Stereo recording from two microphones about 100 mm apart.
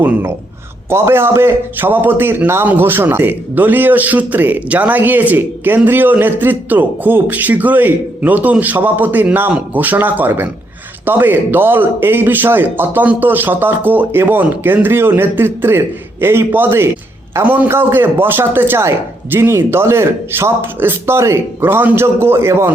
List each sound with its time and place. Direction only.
0.0 s a man's voice: 20° right (ahead or behind)